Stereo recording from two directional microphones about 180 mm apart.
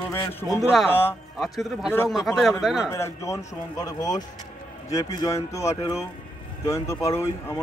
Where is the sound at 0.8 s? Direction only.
10° left (ahead or behind).